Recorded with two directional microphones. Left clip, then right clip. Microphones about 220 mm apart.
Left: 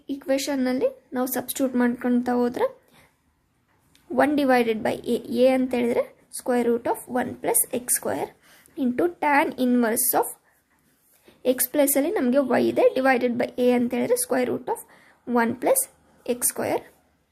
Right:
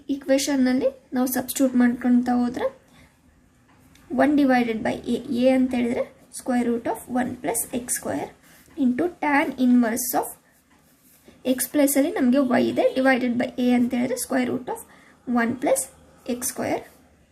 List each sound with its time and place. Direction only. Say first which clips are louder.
0.1 s a woman's voice: right 3 dB; 20° left (ahead or behind)
4.1 s a woman's voice: even; 30° left (ahead or behind)
11.4 s a woman's voice: even; 25° left (ahead or behind)